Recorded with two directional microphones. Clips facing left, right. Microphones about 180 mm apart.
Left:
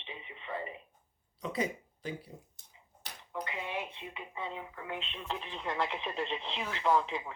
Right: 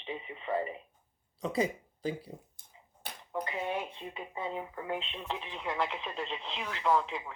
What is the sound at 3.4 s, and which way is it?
Speech, 35° right (ahead or behind).